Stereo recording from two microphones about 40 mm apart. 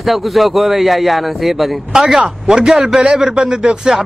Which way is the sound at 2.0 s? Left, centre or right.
Centre.